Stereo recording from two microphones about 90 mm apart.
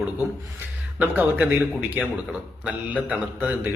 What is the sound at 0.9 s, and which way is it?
Speech, 20° right (ahead or behind).